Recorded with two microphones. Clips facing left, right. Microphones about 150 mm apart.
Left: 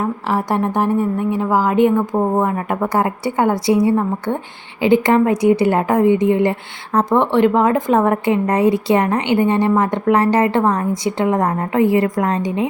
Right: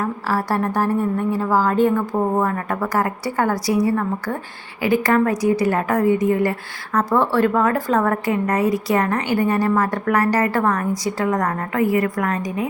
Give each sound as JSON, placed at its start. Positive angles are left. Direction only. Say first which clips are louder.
{"t": 0.0, "sound": "a woman's voice", "louder": "left 3 dB", "side_deg": 20}